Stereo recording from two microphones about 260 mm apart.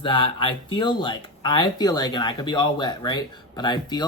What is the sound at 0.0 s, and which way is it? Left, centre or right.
Speech, centre.